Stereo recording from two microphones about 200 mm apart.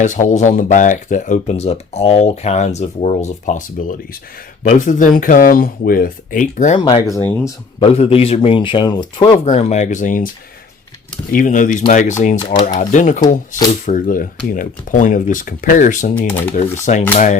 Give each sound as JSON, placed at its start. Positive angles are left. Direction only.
{"t": 0.0, "sound": "speech", "side_deg": 40}
{"t": 6.7, "sound": "speech", "side_deg": 25}
{"t": 7.2, "sound": "speech", "side_deg": 10}
{"t": 7.8, "sound": "speech", "side_deg": 30}
{"t": 11.3, "sound": "speech", "side_deg": 40}